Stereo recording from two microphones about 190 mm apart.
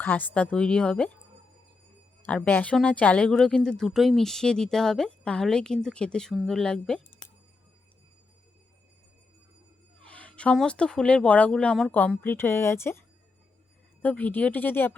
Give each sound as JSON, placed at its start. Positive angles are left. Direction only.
{"t": 0.0, "sound": "speech", "side_deg": 10}
{"t": 2.2, "sound": "speech", "side_deg": 5}
{"t": 10.1, "sound": "speech", "side_deg": 5}
{"t": 14.0, "sound": "speech", "side_deg": 10}